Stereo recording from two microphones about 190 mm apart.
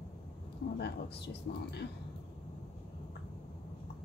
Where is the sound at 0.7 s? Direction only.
60° left (ahead or behind).